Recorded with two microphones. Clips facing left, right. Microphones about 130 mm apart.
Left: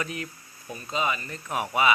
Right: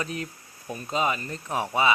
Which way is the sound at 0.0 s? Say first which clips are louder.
Right 1 dB; 35° right (ahead or behind).